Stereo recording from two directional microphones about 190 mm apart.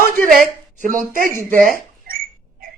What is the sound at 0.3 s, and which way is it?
A woman's voice, 45° right (ahead or behind).